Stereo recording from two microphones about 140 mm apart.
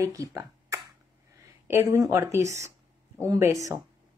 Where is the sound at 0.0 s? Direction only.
25° right (ahead or behind).